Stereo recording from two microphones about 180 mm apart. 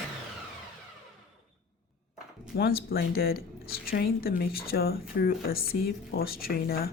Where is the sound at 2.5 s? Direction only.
55° left (ahead or behind).